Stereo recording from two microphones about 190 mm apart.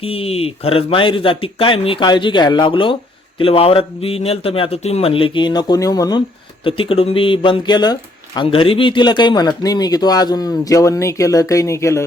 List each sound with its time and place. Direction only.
0.0 s speech: 30° left (ahead or behind); by 12.0 s 15° left (ahead or behind)